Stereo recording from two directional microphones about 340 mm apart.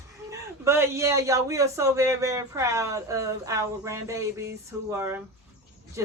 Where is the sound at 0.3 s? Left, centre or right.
Centre.